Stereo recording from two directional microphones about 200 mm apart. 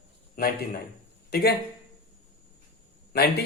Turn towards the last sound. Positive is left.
turn(degrees=50)  # may be behind; listen again after turning